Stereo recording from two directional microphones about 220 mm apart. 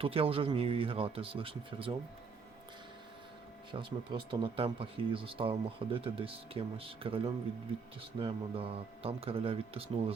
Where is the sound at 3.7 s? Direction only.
25° right (ahead or behind).